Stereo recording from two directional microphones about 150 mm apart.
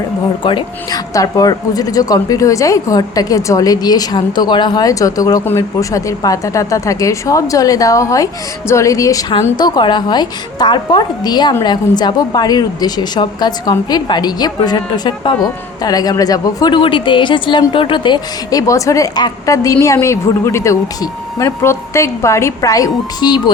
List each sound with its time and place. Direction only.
0.4 s a woman's voice: 30° left (ahead or behind)